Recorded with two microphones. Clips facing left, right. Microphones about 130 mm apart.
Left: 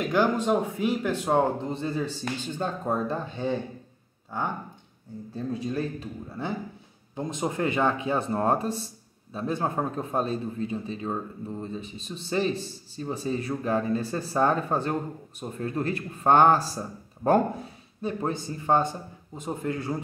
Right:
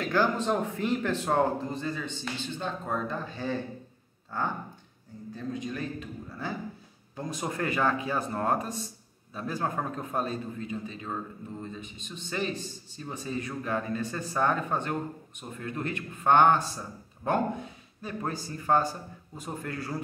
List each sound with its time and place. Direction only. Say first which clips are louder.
0.0 s speech: left 3 dB; 15° left (ahead or behind)
2.2 s speech: left 4 dB; 45° left (ahead or behind); by 4.5 s 15° left (ahead or behind)
5.3 s a man's voice: left 4 dB; 30° left (ahead or behind)
18.2 s a man's voice: left 1 dB; 25° left (ahead or behind)